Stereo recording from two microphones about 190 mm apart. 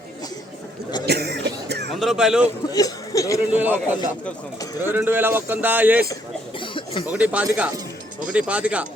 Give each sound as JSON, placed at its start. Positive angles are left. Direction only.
{"t": 1.0, "sound": "cough", "side_deg": -60}
{"t": 2.0, "sound": "a man's voice", "side_deg": 0}
{"t": 2.7, "sound": "speech", "side_deg": 20}
{"t": 3.5, "sound": "speech", "side_deg": -10}
{"t": 4.8, "sound": "speech", "side_deg": -10}
{"t": 6.6, "sound": "a sound", "side_deg": 25}
{"t": 7.1, "sound": "speech", "side_deg": -5}